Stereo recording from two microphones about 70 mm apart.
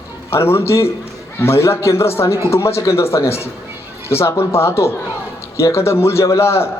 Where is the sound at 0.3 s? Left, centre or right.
Left.